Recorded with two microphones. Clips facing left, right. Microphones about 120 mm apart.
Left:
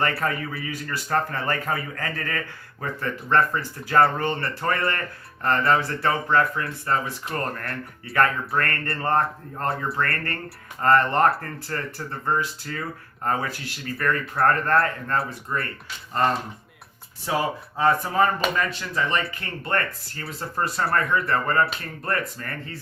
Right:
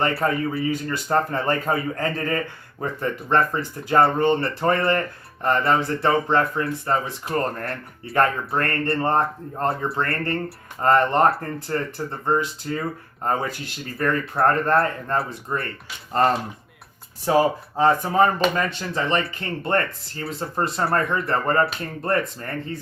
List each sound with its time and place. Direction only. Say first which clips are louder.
0.2 s speech: right 5 dB; 25° right (ahead or behind)
17.2 s speech: right 7 dB; 40° right (ahead or behind)
17.8 s speech: right 2 dB; 25° right (ahead or behind)